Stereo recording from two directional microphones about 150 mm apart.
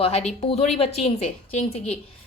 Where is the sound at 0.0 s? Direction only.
45° left (ahead or behind).